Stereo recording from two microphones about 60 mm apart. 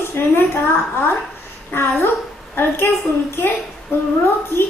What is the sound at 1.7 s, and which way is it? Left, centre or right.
A woman's voice, left.